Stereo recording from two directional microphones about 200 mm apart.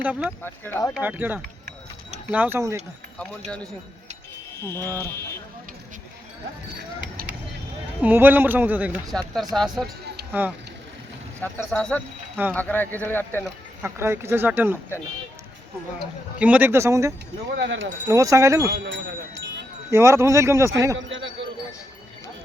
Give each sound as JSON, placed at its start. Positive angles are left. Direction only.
{"t": 0.0, "sound": "speech", "side_deg": -5}
{"t": 0.4, "sound": "speech", "side_deg": 10}
{"t": 0.9, "sound": "speech", "side_deg": -10}
{"t": 4.6, "sound": "speech", "side_deg": 10}
{"t": 8.0, "sound": "speech", "side_deg": -10}
{"t": 11.3, "sound": "speech", "side_deg": 5}
{"t": 13.8, "sound": "speech", "side_deg": -15}
{"t": 16.4, "sound": "speech", "side_deg": -5}
{"t": 17.6, "sound": "wind chime", "side_deg": -65}
{"t": 18.1, "sound": "speech", "side_deg": -15}
{"t": 19.9, "sound": "speech", "side_deg": -15}
{"t": 21.1, "sound": "a man's voice", "side_deg": -65}